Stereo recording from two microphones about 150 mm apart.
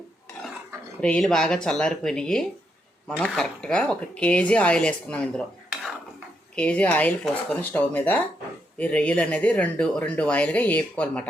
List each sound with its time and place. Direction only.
1.0 s speech: 5° left (ahead or behind)
6.6 s speech: 10° left (ahead or behind)